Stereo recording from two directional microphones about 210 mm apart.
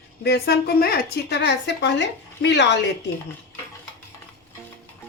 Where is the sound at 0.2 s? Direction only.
50° left (ahead or behind).